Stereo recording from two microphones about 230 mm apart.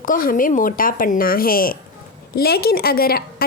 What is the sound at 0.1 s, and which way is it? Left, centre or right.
A woman's voice, left.